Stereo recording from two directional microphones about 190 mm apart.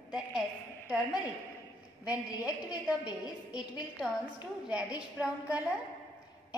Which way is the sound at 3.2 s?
5° right (ahead or behind).